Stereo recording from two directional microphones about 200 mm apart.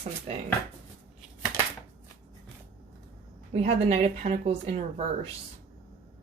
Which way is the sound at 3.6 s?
30° right (ahead or behind).